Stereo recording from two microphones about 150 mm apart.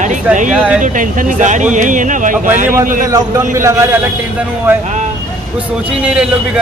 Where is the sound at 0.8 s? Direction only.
60° right (ahead or behind).